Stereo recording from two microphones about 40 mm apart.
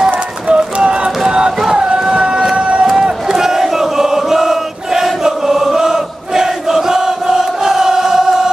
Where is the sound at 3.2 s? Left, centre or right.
Centre.